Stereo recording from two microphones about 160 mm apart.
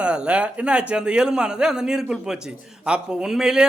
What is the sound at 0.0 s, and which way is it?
A man's voice, 5° right (ahead or behind).